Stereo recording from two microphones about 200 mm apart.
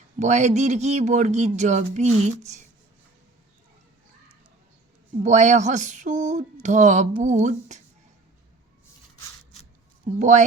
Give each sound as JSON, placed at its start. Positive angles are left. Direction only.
{"t": 0.2, "sound": "speech", "side_deg": -35}
{"t": 5.2, "sound": "speech", "side_deg": -35}
{"t": 10.2, "sound": "speech", "side_deg": -35}